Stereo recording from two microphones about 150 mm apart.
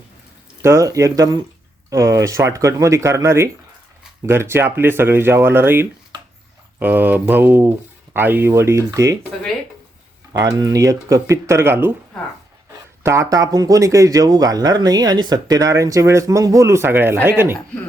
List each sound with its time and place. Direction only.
0.6 s speech: 20° right (ahead or behind)
10.3 s speech: 25° right (ahead or behind)
13.0 s speech: 20° right (ahead or behind)